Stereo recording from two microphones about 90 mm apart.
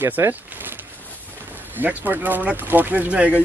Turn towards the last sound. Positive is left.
turn(degrees=-15)  # may be behind; listen again after turning